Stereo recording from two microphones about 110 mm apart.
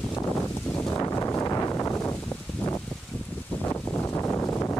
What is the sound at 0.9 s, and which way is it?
Wind noise, 30° left (ahead or behind).